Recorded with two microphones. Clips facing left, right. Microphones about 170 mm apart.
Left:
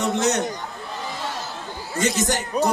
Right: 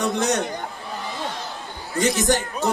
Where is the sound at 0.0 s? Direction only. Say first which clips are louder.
Even; 20° left (ahead or behind).